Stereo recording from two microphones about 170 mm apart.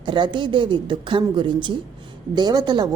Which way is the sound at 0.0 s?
25° right (ahead or behind).